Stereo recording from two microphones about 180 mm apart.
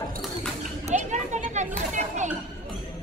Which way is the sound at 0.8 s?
40° right (ahead or behind).